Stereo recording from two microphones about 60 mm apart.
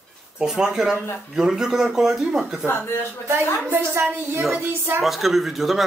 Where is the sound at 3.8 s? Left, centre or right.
Right.